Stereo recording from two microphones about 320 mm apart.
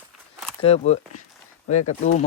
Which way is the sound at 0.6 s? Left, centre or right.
Centre.